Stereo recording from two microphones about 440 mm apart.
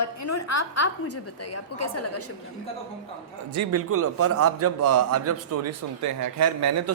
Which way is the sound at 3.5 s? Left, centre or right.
Right.